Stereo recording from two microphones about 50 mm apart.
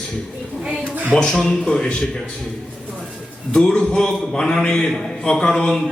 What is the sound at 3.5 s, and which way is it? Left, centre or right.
A man's voice, centre.